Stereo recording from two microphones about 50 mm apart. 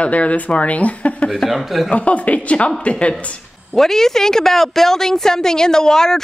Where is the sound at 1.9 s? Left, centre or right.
Left.